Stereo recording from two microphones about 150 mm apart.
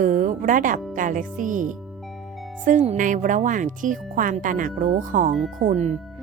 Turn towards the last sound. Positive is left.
turn(degrees=-65)  # may be behind; listen again after turning